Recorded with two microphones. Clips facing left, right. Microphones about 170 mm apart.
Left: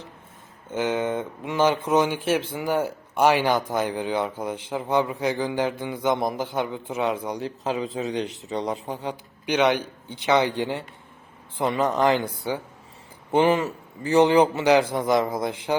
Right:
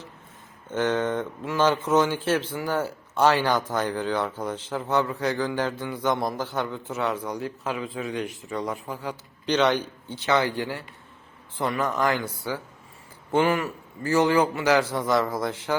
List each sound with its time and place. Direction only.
0.7 s a man's voice: 10° left (ahead or behind)
9.5 s a man's voice: 10° left (ahead or behind)